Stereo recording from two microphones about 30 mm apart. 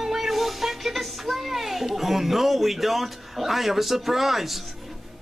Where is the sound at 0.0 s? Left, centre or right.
Centre.